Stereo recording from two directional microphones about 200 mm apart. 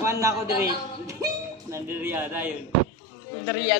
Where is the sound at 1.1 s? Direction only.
15° right (ahead or behind).